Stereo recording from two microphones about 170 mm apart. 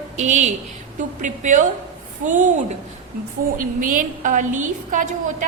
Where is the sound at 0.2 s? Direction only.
45° right (ahead or behind).